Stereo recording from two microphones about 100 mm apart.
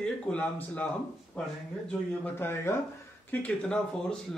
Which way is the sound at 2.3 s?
20° left (ahead or behind).